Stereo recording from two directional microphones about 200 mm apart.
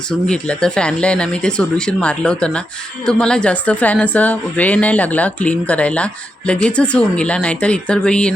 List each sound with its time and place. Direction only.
0.3 s a woman's voice: 5° left (ahead or behind)